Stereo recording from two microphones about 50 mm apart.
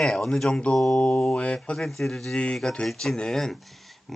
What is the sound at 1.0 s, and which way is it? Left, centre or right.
Speech, left.